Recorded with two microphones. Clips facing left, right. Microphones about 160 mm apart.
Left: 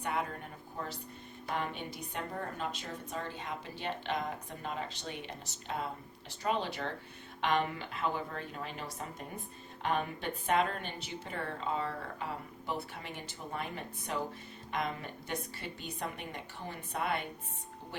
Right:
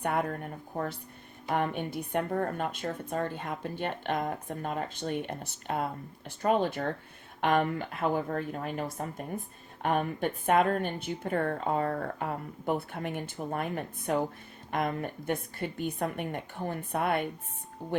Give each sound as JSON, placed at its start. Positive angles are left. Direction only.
{"t": 0.0, "sound": "a woman's voice", "side_deg": -55}
{"t": 1.5, "sound": "a woman's voice", "side_deg": -55}